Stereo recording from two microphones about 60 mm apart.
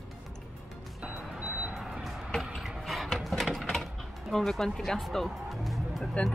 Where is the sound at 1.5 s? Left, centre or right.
Right.